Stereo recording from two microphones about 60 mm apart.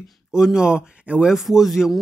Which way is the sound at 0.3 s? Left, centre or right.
Centre.